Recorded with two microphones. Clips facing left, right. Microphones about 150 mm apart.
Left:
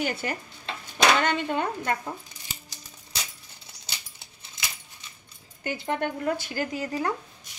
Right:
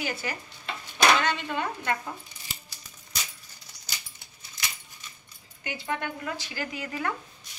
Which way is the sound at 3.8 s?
30° left (ahead or behind).